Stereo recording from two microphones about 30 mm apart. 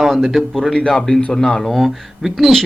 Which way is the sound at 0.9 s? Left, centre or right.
Centre.